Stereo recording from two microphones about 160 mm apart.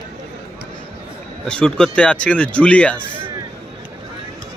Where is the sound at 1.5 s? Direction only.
5° left (ahead or behind).